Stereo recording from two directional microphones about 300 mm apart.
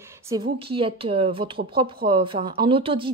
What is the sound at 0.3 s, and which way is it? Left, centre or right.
A woman's voice, centre.